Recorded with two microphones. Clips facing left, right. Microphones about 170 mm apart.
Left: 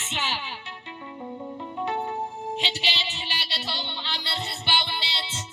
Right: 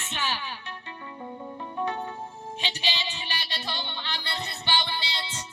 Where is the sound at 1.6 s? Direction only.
20° left (ahead or behind).